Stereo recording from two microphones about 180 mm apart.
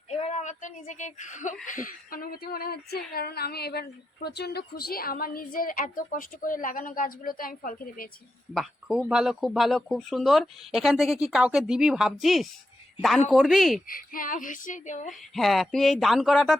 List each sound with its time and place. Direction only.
0.1 s a woman's voice: 40° left (ahead or behind)
8.5 s speech: 5° right (ahead or behind)
13.8 s speech: 50° left (ahead or behind)
15.4 s speech: centre (ahead or behind)